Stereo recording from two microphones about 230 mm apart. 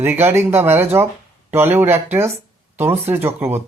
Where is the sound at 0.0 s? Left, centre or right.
Centre.